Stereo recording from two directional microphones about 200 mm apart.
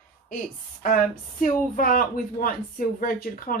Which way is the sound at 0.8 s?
45° left (ahead or behind).